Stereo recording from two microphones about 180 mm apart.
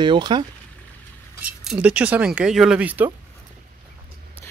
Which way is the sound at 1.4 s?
5° right (ahead or behind).